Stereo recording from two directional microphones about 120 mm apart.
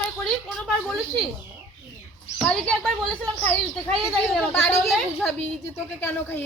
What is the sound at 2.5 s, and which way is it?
A woman's voice, 10° left (ahead or behind).